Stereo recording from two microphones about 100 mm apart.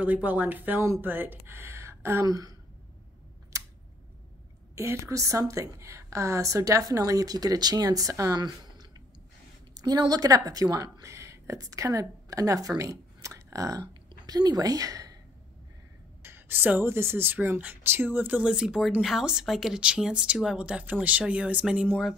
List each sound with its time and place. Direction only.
0.0 s speech: 15° right (ahead or behind)
2.2 s a woman's voice: 40° right (ahead or behind)
4.7 s a woman's voice: 30° right (ahead or behind)
8.4 s a sound: 40° right (ahead or behind)
9.8 s speech: 40° right (ahead or behind)
16.2 s speech: 25° right (ahead or behind)